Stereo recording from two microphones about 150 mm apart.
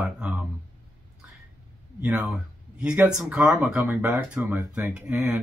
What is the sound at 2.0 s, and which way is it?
Speech, 5° right (ahead or behind).